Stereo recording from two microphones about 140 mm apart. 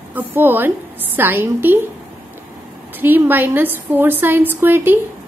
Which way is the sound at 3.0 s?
15° right (ahead or behind).